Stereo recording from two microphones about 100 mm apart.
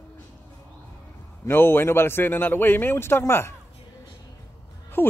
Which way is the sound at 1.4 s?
20° left (ahead or behind).